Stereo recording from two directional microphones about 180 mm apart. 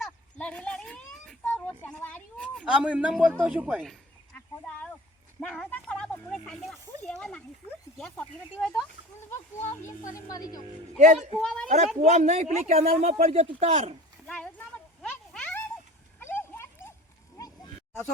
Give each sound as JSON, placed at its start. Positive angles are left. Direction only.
{"t": 0.0, "sound": "children playing", "side_deg": 5}
{"t": 2.6, "sound": "a man's voice", "side_deg": -5}
{"t": 4.4, "sound": "a sound", "side_deg": 10}
{"t": 5.4, "sound": "speech", "side_deg": 5}
{"t": 10.2, "sound": "speech", "side_deg": 20}
{"t": 10.9, "sound": "a man's voice", "side_deg": -40}
{"t": 11.3, "sound": "speech", "side_deg": 5}
{"t": 12.0, "sound": "a man's voice", "side_deg": -40}
{"t": 14.3, "sound": "a sound", "side_deg": 5}